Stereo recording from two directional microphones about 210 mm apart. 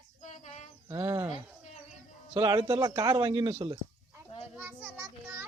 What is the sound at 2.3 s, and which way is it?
Speech, 20° right (ahead or behind).